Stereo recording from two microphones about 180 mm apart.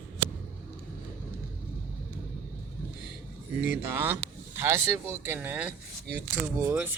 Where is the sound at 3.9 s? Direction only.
10° right (ahead or behind).